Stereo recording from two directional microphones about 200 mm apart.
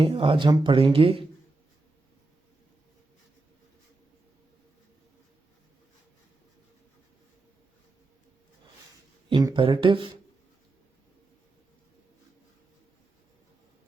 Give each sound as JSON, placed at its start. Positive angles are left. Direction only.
{"t": 0.0, "sound": "speech", "side_deg": -25}
{"t": 9.3, "sound": "speech", "side_deg": -20}